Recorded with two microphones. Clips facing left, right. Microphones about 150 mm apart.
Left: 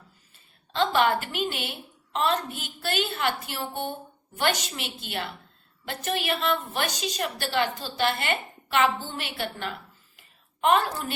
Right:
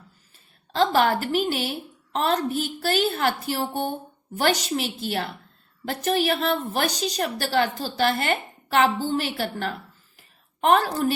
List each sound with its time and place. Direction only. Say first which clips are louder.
0.7 s a woman's voice: right 3 dB; 40° right (ahead or behind)